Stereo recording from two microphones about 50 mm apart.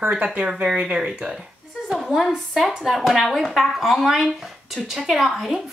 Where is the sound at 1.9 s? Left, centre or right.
Centre.